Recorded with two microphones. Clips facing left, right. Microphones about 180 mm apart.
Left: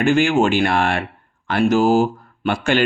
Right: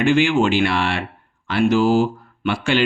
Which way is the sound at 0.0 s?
45° left (ahead or behind).